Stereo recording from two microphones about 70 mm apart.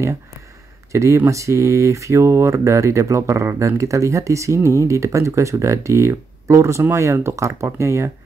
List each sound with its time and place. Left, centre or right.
0.9 s speech: right